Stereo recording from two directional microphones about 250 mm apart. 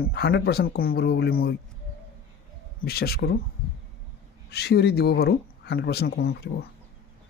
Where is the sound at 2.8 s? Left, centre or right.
Left.